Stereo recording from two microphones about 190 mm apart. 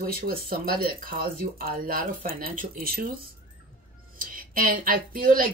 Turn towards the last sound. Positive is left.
turn(degrees=-45)  # may be behind; listen again after turning